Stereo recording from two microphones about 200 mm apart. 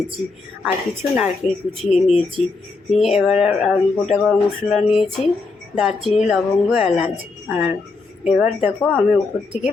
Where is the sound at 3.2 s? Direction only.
5° right (ahead or behind).